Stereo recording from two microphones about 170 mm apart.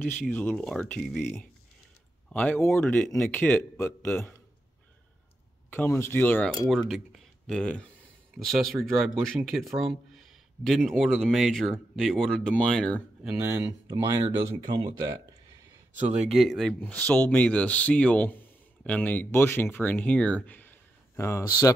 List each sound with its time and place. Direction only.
0.0 s speech: 10° left (ahead or behind)
5.7 s speech: 10° left (ahead or behind)
6.7 s speech: centre (ahead or behind)
13.5 s speech: 20° right (ahead or behind)
16.0 s speech: 40° right (ahead or behind)
16.3 s speech: centre (ahead or behind); by 21.7 s 20° left (ahead or behind)